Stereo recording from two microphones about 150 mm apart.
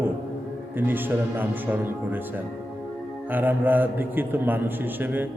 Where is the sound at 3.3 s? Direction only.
10° right (ahead or behind).